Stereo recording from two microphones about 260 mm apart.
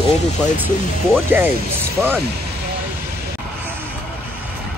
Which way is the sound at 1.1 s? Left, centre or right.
Centre.